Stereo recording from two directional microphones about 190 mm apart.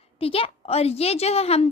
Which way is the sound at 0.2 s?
30° left (ahead or behind).